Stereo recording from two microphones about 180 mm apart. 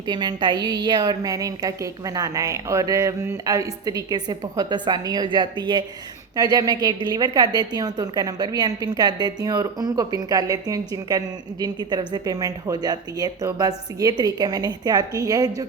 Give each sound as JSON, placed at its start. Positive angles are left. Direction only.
{"t": 0.0, "sound": "a woman's voice", "side_deg": -25}